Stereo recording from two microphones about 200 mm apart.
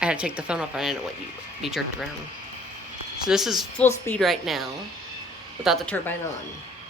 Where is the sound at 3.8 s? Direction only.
10° left (ahead or behind).